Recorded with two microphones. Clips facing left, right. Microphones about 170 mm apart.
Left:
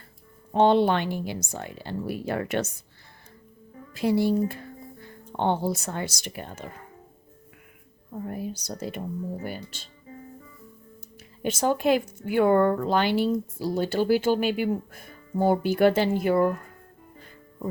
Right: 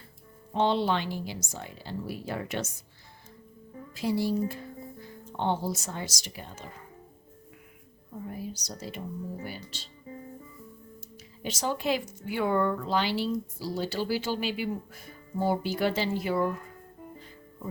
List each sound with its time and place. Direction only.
0.5 s speech: 55° left (ahead or behind)
3.9 s speech: 60° left (ahead or behind)
8.2 s speech: 55° left (ahead or behind)
11.4 s speech: 55° left (ahead or behind)